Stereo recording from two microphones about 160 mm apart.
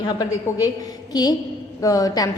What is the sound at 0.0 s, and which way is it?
A woman's voice, 20° left (ahead or behind).